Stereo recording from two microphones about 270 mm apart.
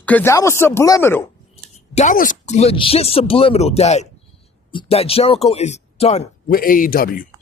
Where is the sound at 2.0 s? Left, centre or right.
Left.